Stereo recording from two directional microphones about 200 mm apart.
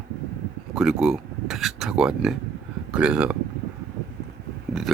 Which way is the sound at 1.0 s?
Centre (ahead or behind).